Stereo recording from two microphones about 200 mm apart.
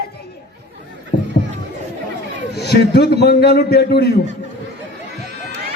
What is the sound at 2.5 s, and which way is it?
A man's voice, 55° left (ahead or behind).